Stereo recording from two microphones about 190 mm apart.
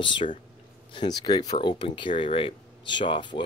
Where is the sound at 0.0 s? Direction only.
25° left (ahead or behind).